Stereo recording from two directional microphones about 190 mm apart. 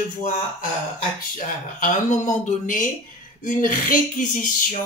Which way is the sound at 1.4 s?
45° left (ahead or behind).